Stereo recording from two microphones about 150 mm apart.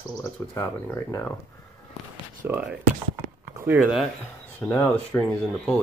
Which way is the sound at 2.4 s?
15° right (ahead or behind).